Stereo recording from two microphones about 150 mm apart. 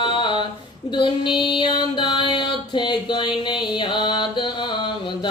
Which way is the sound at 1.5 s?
30° left (ahead or behind).